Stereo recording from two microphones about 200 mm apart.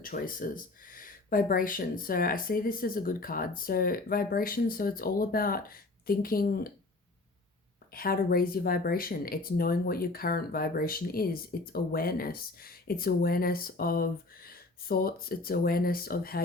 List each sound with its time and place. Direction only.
0.0 s speech: 45° left (ahead or behind)
7.9 s speech: 50° left (ahead or behind)